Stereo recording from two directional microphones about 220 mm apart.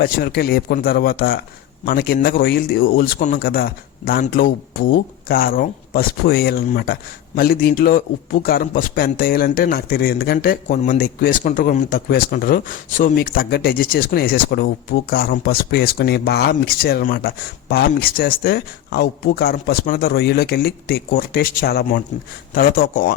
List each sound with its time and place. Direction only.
0.0 s speech: 45° left (ahead or behind)